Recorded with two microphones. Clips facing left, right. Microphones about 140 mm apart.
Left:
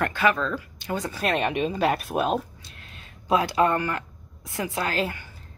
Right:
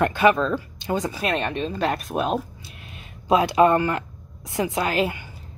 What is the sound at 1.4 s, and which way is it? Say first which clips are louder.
Speech: left 1 dB; 10° left (ahead or behind).